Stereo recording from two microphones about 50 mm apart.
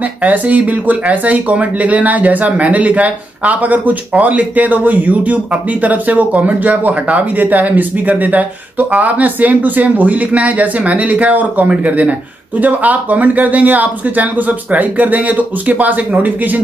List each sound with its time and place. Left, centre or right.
0.2 s speech: right